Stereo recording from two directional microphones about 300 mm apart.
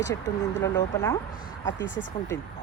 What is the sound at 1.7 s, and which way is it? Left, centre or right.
Speech, left.